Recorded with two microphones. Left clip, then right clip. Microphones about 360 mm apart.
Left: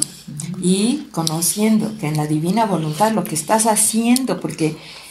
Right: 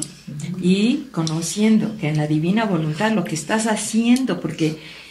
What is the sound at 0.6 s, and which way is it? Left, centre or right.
Speech, centre.